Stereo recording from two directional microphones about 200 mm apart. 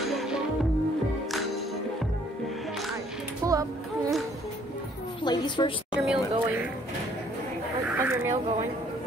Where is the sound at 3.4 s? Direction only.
15° right (ahead or behind).